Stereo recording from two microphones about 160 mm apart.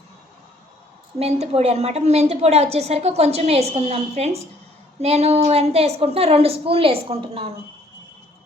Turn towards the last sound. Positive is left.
turn(degrees=-35)  # may be behind; listen again after turning